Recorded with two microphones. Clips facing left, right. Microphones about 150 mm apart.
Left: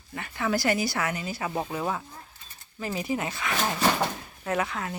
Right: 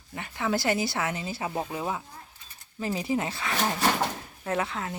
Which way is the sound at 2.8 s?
30° right (ahead or behind).